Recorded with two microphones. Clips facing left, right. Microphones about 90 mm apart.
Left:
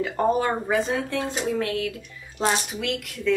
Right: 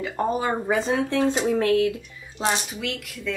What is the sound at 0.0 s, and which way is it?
Speech, centre (ahead or behind).